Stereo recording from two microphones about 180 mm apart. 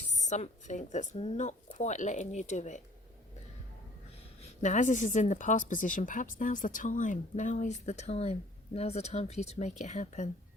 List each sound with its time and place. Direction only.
0.2 s speech: 40° left (ahead or behind)
4.6 s speech: 45° left (ahead or behind)